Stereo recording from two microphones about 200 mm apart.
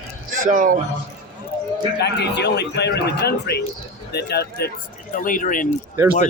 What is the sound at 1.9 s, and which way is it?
A man's voice, 55° left (ahead or behind).